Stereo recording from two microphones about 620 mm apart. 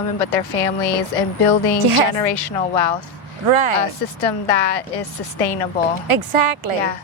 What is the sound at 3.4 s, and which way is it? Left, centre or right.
Speech, right.